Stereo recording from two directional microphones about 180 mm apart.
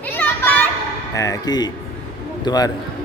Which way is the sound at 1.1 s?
20° left (ahead or behind).